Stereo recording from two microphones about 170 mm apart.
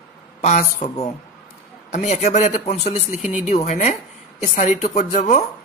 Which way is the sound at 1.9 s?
40° left (ahead or behind).